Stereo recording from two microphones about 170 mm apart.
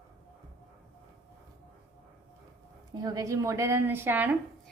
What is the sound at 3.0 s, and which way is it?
A woman's voice, 20° right (ahead or behind).